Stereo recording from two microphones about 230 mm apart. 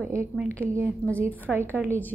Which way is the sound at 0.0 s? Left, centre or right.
Centre.